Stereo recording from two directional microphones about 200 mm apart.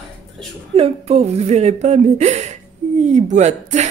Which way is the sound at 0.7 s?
30° right (ahead or behind).